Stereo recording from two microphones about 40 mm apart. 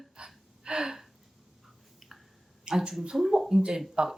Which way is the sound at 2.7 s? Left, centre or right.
Right.